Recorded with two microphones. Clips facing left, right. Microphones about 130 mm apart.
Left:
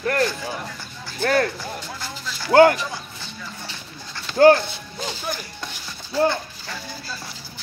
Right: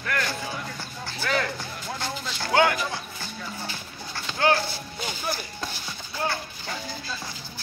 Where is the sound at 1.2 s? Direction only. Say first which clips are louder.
Left 7 dB; 55° left (ahead or behind).